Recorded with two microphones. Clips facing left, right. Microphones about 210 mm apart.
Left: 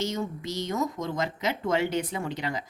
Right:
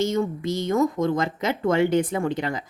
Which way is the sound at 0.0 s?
55° right (ahead or behind).